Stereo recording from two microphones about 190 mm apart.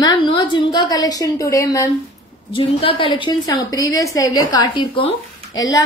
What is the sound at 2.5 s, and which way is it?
A woman's voice, 30° left (ahead or behind).